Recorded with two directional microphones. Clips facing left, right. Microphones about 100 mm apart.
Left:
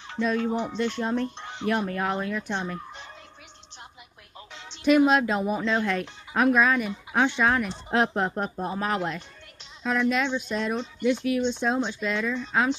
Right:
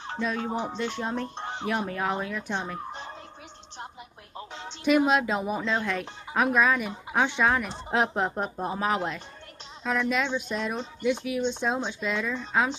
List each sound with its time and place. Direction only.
0.4 s music: 35° right (ahead or behind)
0.8 s speech: 10° right (ahead or behind)
1.3 s music: 40° right (ahead or behind)
1.7 s speech: 10° right (ahead or behind)
4.4 s music: 40° right (ahead or behind)
4.8 s speech: 5° right (ahead or behind)